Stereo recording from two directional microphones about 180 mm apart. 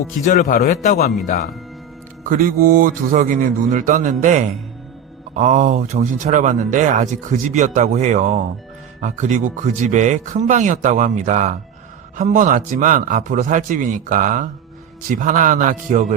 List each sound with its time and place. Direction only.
0.3 s a man's voice: 45° left (ahead or behind)
2.2 s speech: 50° right (ahead or behind)